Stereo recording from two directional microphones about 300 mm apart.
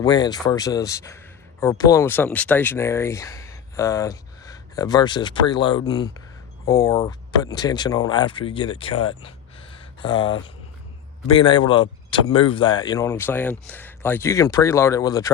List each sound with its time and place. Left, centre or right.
0.0 s speech: centre